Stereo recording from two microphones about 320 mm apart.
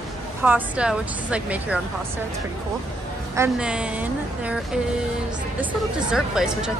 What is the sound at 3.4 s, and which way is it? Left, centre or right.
Speech, centre.